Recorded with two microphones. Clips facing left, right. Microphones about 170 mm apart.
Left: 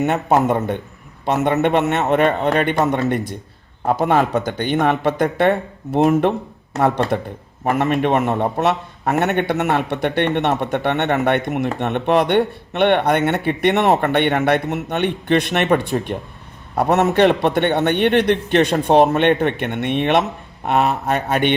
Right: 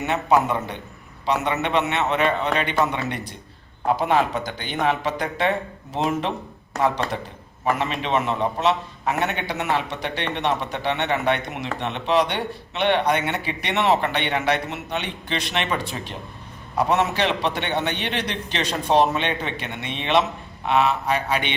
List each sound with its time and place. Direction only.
0.0 s a man's voice: 50° left (ahead or behind)